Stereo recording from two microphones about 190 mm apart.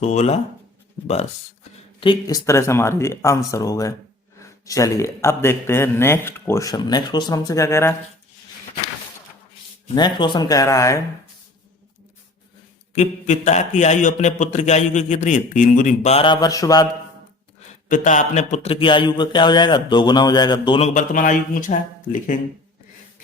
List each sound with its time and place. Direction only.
0.0 s a man's voice: 35° left (ahead or behind)
2.0 s speech: 25° left (ahead or behind)
9.9 s speech: 25° left (ahead or behind)
13.0 s a man's voice: 40° left (ahead or behind); by 16.8 s 20° left (ahead or behind)
17.8 s speech: 40° left (ahead or behind)